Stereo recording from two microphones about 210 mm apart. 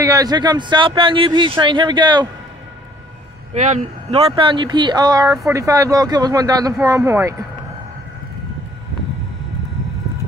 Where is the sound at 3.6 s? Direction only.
35° right (ahead or behind); by 7.5 s 15° right (ahead or behind).